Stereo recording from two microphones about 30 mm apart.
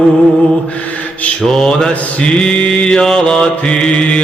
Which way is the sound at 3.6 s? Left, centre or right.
Left.